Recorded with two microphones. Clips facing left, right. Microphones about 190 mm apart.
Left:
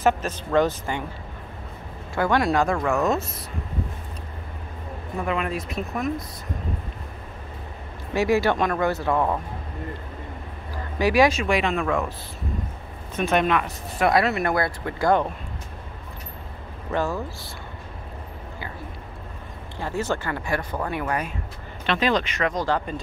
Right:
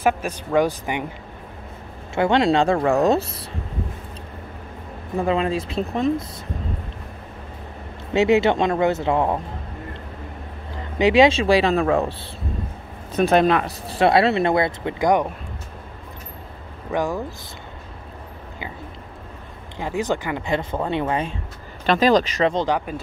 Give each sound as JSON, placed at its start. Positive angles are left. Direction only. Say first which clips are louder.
{"t": 0.0, "sound": "speech", "louder": "right 1 dB", "side_deg": -10}
{"t": 2.1, "sound": "speech", "louder": "right 4 dB", "side_deg": -25}
{"t": 5.2, "sound": "speech", "louder": "right 5 dB", "side_deg": -30}
{"t": 8.1, "sound": "speech", "louder": "right 4 dB", "side_deg": -20}
{"t": 11.0, "sound": "speech", "louder": "right 4 dB", "side_deg": -20}
{"t": 16.9, "sound": "speech", "louder": "right 2 dB", "side_deg": -15}
{"t": 19.8, "sound": "speech", "louder": "right 3 dB", "side_deg": -15}
{"t": 21.8, "sound": "speech", "louder": "right 6 dB", "side_deg": -40}
{"t": 22.7, "sound": "speech", "louder": "right 2 dB", "side_deg": -10}